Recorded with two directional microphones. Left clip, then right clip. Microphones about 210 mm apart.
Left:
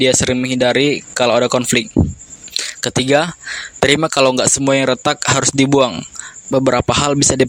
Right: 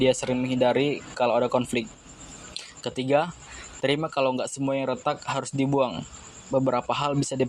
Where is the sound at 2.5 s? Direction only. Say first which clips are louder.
Left 14 dB; 55° left (ahead or behind).